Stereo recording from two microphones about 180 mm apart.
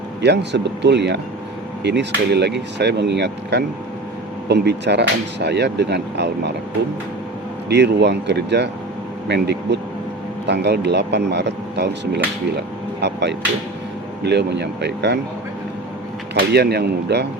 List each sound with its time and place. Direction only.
0.2 s speech: 70° right (ahead or behind)
7.7 s speech: 70° right (ahead or behind)
16.3 s speech: 65° right (ahead or behind)